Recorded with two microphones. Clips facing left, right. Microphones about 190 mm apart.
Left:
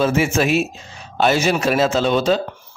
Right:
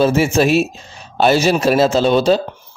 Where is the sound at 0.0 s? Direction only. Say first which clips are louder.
Right 4 dB; 35° right (ahead or behind).